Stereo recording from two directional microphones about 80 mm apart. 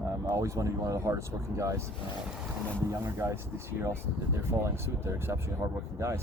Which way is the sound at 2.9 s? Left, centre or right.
Right.